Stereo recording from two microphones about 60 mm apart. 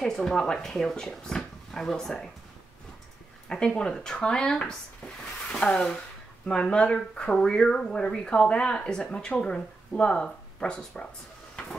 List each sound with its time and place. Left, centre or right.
0.0 s speech: centre
3.4 s speech: centre